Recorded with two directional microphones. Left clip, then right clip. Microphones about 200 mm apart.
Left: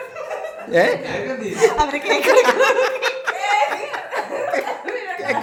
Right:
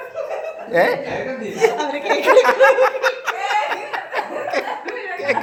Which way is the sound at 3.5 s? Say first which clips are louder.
Left 3 dB; 5° left (ahead or behind).